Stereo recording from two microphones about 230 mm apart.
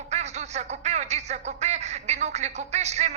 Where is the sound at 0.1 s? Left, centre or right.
Right.